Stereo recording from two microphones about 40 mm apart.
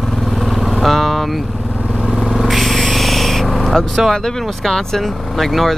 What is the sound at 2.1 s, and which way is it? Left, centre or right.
Vehicle, right.